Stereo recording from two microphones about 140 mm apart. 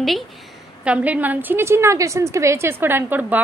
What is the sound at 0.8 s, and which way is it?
A woman's voice, 10° right (ahead or behind).